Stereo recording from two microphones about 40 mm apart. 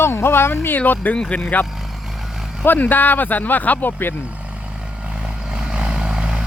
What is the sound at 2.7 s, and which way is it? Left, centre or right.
Speech, left.